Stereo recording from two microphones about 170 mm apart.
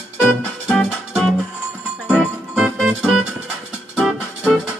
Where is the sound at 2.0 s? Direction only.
5° right (ahead or behind).